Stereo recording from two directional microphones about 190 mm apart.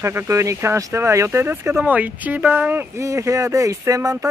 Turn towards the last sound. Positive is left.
turn(degrees=-15)  # may be behind; listen again after turning